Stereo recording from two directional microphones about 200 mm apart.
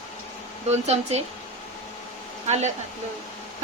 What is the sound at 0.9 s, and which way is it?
Speech, 30° right (ahead or behind).